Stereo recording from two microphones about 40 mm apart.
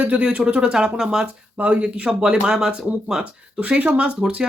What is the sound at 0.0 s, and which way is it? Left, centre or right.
Speech, right.